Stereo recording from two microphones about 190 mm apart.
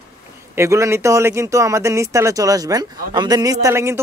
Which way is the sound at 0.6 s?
15° right (ahead or behind).